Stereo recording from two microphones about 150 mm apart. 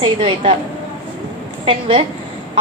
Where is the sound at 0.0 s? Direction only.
40° right (ahead or behind).